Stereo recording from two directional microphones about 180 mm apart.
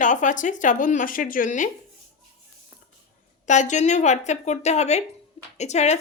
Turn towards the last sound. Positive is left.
turn(degrees=40)  # may be behind; listen again after turning